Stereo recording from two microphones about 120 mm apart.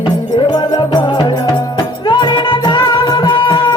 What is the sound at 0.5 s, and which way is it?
Music, 40° left (ahead or behind).